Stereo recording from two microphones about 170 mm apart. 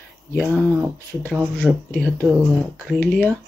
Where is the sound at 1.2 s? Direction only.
5° right (ahead or behind).